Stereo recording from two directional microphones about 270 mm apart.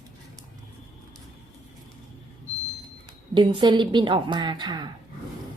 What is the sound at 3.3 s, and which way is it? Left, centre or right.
A woman's voice, centre.